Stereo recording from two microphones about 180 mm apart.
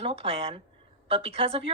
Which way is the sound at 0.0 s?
30° right (ahead or behind).